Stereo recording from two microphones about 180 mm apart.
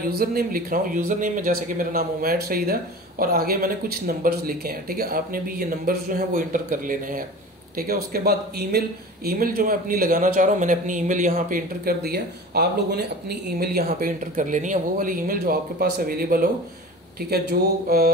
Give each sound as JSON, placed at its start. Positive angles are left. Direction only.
{"t": 0.1, "sound": "speech", "side_deg": -55}